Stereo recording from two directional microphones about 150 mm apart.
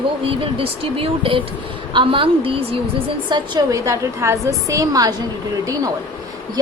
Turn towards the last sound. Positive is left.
turn(degrees=-20)  # may be behind; listen again after turning